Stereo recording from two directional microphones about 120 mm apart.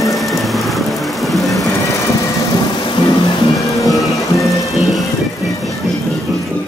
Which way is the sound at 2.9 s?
40° left (ahead or behind).